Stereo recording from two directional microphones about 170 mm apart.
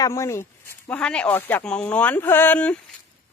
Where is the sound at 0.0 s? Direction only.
15° left (ahead or behind).